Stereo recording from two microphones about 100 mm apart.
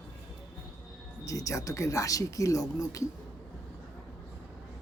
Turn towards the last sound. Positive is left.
turn(degrees=35)  # may be behind; listen again after turning